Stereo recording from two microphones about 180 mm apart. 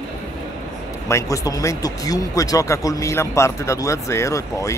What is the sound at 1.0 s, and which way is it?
Speech, 15° left (ahead or behind).